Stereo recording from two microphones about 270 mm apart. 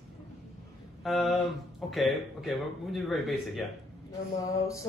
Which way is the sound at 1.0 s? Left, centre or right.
Centre.